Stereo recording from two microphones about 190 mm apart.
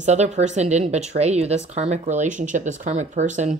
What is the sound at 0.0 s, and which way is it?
Speech, 35° right (ahead or behind).